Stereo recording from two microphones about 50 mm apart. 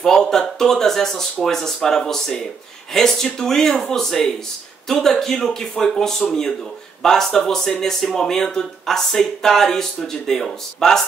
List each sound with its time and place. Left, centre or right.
0.0 s speech: centre